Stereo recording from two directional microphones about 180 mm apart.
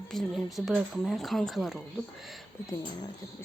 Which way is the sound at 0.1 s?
Centre (ahead or behind).